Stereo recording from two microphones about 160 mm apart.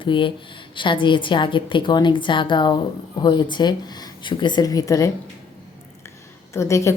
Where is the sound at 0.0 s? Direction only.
30° left (ahead or behind).